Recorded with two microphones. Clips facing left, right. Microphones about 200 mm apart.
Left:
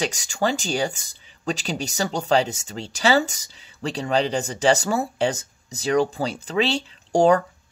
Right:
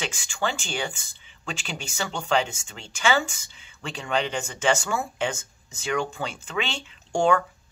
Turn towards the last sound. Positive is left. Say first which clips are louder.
# left 5 dB
turn(degrees=35)  # may be behind; listen again after turning